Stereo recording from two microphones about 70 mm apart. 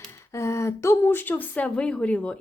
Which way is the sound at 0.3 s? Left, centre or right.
Left.